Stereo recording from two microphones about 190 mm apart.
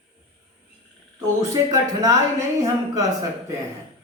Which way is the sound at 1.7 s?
20° right (ahead or behind).